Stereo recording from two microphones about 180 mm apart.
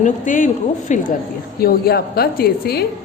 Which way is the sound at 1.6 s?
60° left (ahead or behind).